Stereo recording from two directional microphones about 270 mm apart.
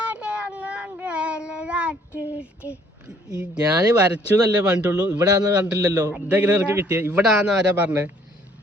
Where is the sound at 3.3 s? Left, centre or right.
Centre.